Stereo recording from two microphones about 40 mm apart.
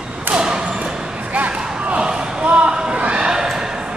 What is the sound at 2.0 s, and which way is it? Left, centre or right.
Basketball bounce, right.